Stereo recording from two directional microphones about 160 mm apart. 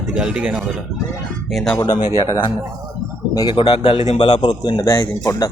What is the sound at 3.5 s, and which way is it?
Speech, 35° left (ahead or behind).